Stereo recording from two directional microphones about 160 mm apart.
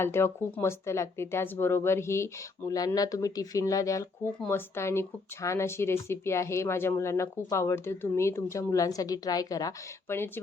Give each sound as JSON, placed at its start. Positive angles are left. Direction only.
{"t": 0.0, "sound": "speech", "side_deg": 15}